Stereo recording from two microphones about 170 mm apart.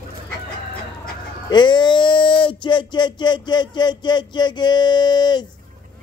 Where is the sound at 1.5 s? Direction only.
25° left (ahead or behind).